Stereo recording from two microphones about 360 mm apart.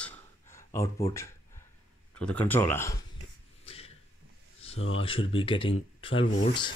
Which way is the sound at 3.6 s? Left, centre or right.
Centre.